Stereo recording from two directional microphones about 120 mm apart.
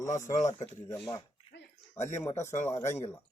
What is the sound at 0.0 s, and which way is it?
Speech, 25° left (ahead or behind).